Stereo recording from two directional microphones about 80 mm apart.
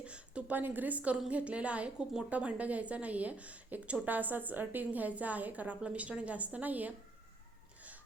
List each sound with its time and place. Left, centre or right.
0.0 s a woman's voice: centre